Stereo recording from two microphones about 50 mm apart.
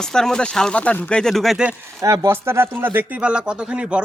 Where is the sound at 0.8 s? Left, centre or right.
Left.